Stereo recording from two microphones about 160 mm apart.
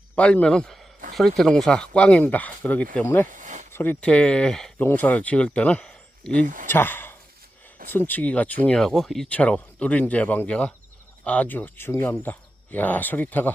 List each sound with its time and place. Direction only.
0.2 s a man's voice: 5° left (ahead or behind)
3.2 s a sound: 50° right (ahead or behind)
3.7 s speech: 10° left (ahead or behind)
6.4 s speech: 55° right (ahead or behind)
6.7 s speech: 15° left (ahead or behind)